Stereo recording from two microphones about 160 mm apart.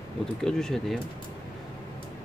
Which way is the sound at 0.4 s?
5° left (ahead or behind).